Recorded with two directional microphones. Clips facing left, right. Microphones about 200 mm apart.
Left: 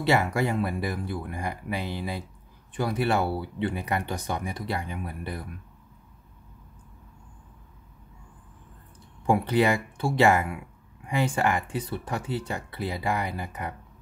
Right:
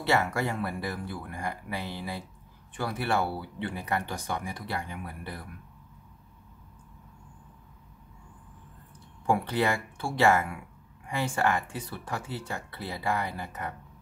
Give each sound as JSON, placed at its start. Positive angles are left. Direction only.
{"t": 0.0, "sound": "speech", "side_deg": 15}
{"t": 9.2, "sound": "speech", "side_deg": 20}